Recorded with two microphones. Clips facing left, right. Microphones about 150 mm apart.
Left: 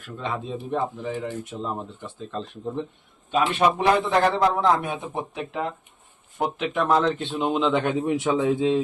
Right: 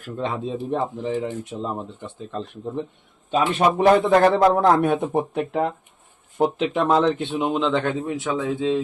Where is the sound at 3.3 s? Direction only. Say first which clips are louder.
Right 2 dB; 40° right (ahead or behind).